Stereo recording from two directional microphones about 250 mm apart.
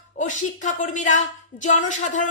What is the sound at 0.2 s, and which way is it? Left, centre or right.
A woman's voice, left.